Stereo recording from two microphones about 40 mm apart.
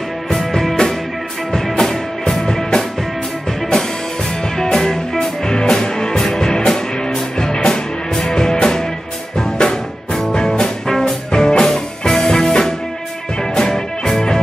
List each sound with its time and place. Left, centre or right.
0.3 s music: centre
4.6 s music: centre